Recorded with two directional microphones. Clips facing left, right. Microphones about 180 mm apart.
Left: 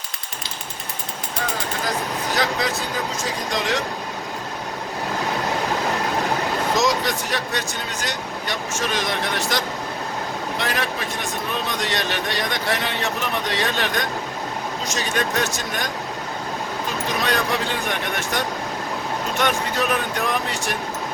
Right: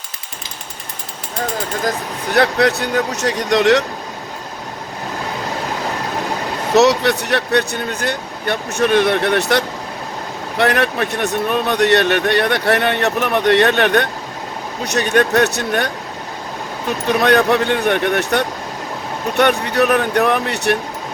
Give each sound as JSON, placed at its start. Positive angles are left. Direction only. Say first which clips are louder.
{"t": 2.3, "sound": "speech", "louder": "right 10 dB", "side_deg": -65}
{"t": 6.7, "sound": "speech", "louder": "right 12 dB", "side_deg": -70}
{"t": 17.1, "sound": "speech", "louder": "right 11 dB", "side_deg": -65}